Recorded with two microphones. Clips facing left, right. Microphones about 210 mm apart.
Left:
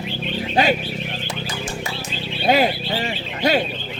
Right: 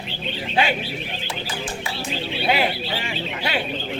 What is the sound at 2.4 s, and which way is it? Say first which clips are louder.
Speech: left 5 dB; 40° left (ahead or behind).